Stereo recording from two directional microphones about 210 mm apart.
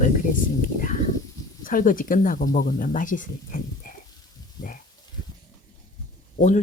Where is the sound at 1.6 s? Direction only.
40° left (ahead or behind).